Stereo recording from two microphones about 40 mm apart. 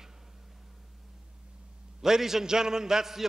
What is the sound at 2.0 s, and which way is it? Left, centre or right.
A man's voice, centre.